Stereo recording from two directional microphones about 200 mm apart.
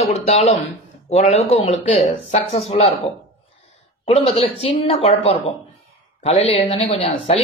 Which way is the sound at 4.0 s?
30° left (ahead or behind).